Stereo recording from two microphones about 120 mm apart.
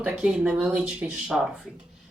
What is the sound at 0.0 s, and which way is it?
Speech, 10° right (ahead or behind).